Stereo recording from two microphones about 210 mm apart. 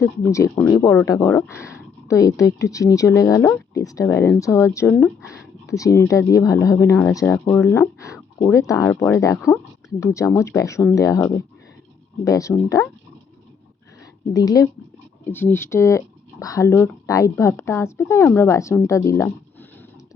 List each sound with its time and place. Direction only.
0.0 s speech: 15° left (ahead or behind)
14.0 s a sound: 15° left (ahead or behind)
15.2 s speech: 10° left (ahead or behind)